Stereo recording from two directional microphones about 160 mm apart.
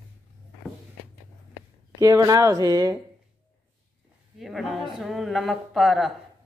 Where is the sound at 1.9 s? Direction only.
20° right (ahead or behind).